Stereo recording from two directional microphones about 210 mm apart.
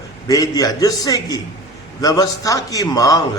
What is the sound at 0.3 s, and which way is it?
A man's voice, 15° left (ahead or behind).